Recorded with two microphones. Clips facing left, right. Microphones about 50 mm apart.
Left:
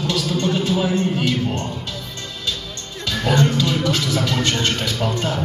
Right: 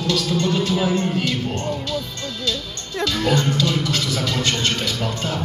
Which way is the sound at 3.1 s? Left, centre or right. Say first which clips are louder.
Left 2 dB; centre.